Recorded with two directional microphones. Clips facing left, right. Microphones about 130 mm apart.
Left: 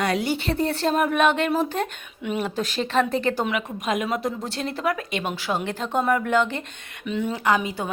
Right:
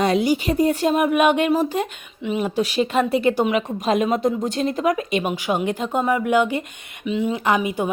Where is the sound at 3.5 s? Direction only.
30° right (ahead or behind); by 7.4 s 5° right (ahead or behind).